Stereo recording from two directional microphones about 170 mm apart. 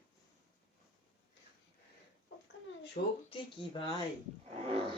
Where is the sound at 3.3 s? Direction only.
30° left (ahead or behind).